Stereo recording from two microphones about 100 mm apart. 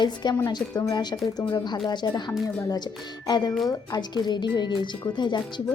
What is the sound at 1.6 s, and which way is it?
Speech, 50° left (ahead or behind).